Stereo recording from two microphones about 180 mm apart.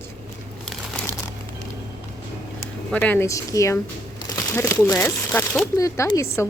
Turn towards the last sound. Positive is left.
turn(degrees=15)  # may be behind; listen again after turning